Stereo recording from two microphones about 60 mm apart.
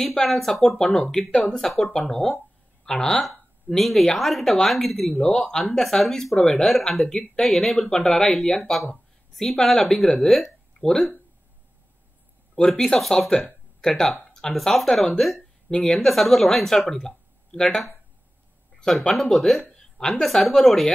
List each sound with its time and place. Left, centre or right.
0.0 s a woman's voice: centre
0.8 s speech: left
1.1 s a woman's voice: centre
12.5 s a woman's voice: centre
16.1 s a woman's voice: centre
19.8 s a sound: centre
20.2 s a woman's voice: centre